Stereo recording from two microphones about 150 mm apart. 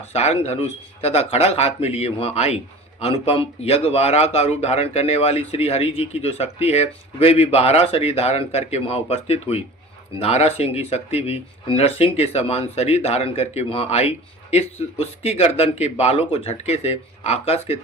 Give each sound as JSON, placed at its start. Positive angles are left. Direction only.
{"t": 0.0, "sound": "a man's voice", "side_deg": 45}